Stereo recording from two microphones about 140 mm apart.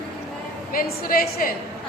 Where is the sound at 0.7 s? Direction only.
90° left.